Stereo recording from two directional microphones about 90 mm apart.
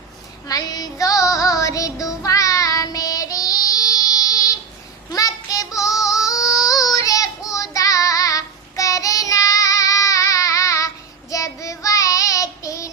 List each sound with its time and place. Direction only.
0.4 s music: 45° left (ahead or behind)
5.1 s child singing: 40° left (ahead or behind)
6.2 s yodeling: 40° left (ahead or behind)
6.7 s child singing: 40° left (ahead or behind)